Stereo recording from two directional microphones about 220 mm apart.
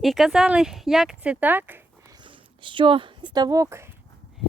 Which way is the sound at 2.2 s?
20° right (ahead or behind).